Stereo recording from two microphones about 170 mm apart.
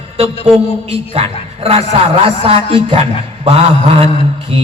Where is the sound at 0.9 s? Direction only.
35° right (ahead or behind).